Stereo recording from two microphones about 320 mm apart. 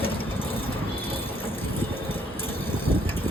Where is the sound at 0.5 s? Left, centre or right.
Centre.